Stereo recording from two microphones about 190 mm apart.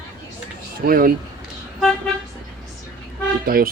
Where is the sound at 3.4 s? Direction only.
50° right (ahead or behind).